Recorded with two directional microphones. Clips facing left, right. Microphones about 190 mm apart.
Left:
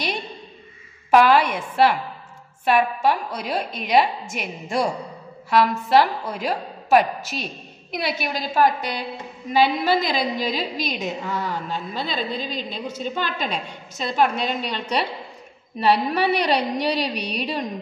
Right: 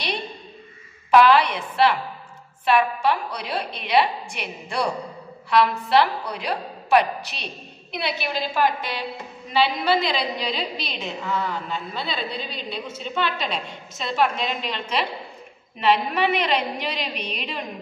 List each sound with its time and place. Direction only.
1.1 s a woman's voice: 45° left (ahead or behind)